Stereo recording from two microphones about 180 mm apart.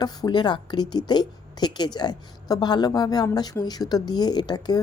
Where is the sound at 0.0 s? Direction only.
25° left (ahead or behind).